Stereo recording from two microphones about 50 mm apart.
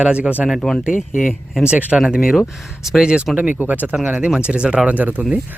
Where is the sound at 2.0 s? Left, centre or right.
Centre.